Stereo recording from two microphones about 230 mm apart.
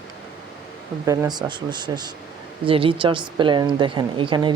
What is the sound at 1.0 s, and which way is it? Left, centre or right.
A woman's voice, centre.